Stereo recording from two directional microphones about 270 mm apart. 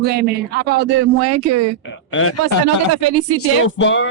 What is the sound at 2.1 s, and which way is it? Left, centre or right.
Speech, left.